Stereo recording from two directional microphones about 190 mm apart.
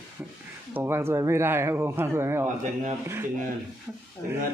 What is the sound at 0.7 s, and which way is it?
Speech, 10° right (ahead or behind).